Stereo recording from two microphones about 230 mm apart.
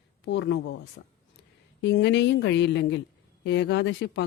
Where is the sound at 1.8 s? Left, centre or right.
Left.